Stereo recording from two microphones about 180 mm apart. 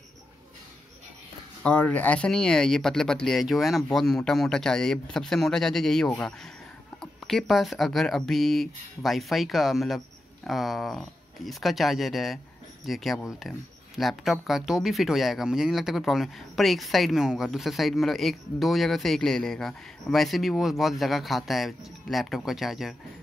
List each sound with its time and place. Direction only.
1.6 s speech: 5° left (ahead or behind)